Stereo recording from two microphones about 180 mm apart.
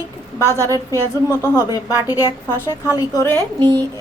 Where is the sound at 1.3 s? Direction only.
15° left (ahead or behind).